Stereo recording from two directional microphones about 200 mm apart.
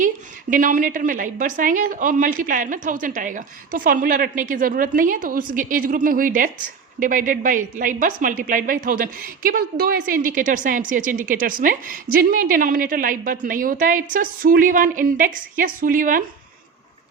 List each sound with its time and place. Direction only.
0.5 s a woman's voice: 40° right (ahead or behind)